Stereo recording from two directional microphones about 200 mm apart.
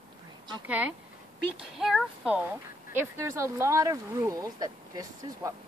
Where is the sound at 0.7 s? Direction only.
5° right (ahead or behind).